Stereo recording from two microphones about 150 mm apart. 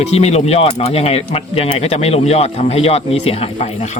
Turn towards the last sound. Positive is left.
turn(degrees=45)  # may be behind; listen again after turning